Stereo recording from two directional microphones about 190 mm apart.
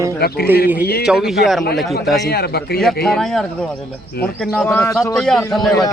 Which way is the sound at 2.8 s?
Centre (ahead or behind).